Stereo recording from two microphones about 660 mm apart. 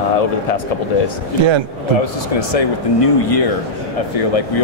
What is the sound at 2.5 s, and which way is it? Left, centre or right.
Speech, left.